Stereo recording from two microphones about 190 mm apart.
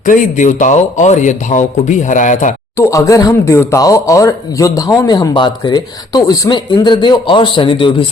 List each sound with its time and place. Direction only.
0.0 s a man's voice: 45° left (ahead or behind)
2.7 s speech: 15° left (ahead or behind)